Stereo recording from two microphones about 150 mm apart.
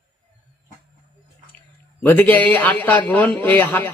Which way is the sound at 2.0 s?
10° left (ahead or behind).